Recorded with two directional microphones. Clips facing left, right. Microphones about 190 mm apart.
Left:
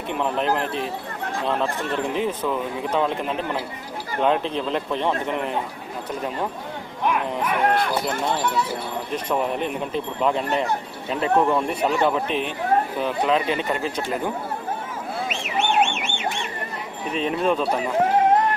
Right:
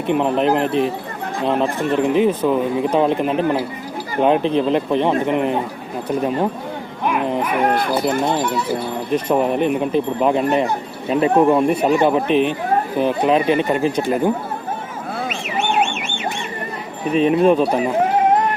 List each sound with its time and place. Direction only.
0.1 s speech: 20° right (ahead or behind)
7.0 s dog: 10° right (ahead or behind)
7.4 s speech: 10° right (ahead or behind)
17.2 s speech: 15° right (ahead or behind)